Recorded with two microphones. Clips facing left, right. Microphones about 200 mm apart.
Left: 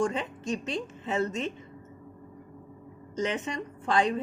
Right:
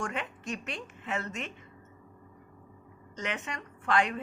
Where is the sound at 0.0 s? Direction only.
30° left (ahead or behind).